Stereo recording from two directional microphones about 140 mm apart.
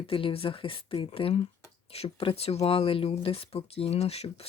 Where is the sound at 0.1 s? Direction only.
40° left (ahead or behind).